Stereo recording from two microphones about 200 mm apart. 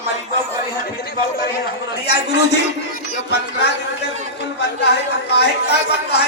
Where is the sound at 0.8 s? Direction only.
50° left (ahead or behind).